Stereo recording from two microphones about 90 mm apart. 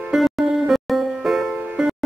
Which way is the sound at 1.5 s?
15° right (ahead or behind).